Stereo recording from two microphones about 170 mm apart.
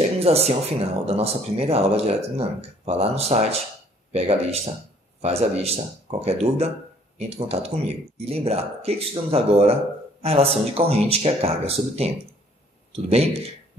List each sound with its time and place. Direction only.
0.2 s speech: 35° right (ahead or behind)